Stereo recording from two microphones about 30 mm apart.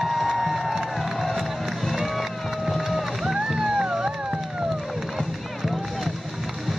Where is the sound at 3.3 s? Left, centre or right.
Centre.